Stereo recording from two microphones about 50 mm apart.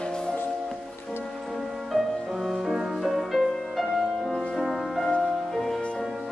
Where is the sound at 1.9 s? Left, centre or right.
Centre.